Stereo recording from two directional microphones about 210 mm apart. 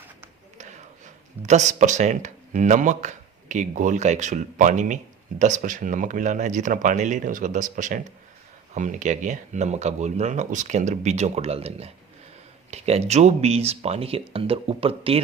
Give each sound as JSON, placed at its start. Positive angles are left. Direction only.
{"t": 0.6, "sound": "speech", "side_deg": -35}